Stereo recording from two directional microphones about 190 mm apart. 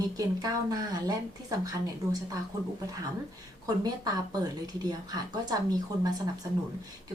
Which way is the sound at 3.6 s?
20° right (ahead or behind).